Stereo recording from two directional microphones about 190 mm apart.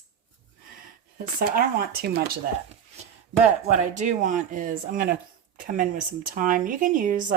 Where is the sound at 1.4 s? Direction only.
50° right (ahead or behind).